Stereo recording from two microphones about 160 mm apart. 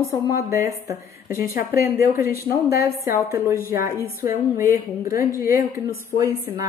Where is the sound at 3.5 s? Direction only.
65° left (ahead or behind).